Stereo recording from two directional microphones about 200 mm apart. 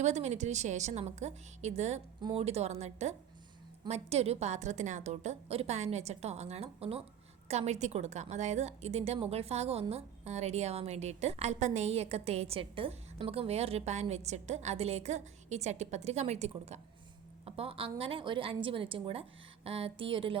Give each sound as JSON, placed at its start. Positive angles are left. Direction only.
{"t": 0.0, "sound": "a woman's voice", "side_deg": -35}